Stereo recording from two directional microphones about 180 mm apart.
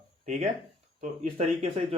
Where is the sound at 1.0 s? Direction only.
40° right (ahead or behind).